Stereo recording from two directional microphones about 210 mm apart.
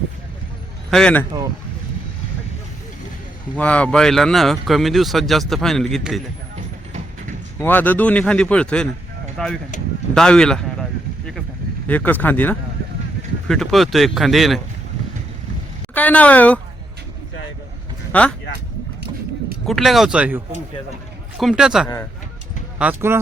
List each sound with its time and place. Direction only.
0.9 s speech: 5° left (ahead or behind)
3.5 s speech: 5° left (ahead or behind)
7.6 s speech: 10° left (ahead or behind)
9.7 s a sound: 35° left (ahead or behind)
10.2 s speech: 5° left (ahead or behind)
11.9 s speech: 10° left (ahead or behind)
16.0 s speech: 5° left (ahead or behind)
18.1 s speech: 5° left (ahead or behind)
19.6 s speech: centre (ahead or behind)